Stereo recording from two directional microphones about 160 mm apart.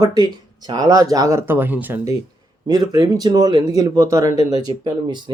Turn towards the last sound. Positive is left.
turn(degrees=-30)  # may be behind; listen again after turning